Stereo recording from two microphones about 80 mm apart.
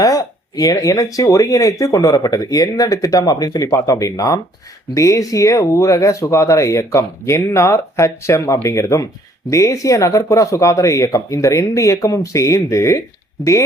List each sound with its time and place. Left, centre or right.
0.0 s speech: left